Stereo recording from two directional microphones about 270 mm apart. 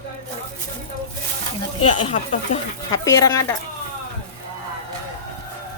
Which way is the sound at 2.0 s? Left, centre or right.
Left.